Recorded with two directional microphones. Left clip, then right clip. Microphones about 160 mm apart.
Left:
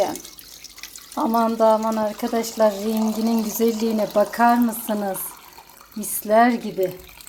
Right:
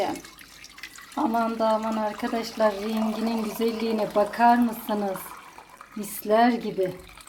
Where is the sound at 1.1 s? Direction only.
30° left (ahead or behind).